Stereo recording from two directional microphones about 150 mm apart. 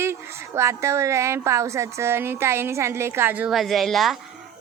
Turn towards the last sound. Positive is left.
turn(degrees=0)  # may be behind; listen again after turning